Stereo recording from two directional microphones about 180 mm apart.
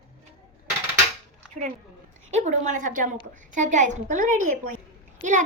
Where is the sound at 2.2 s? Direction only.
40° right (ahead or behind).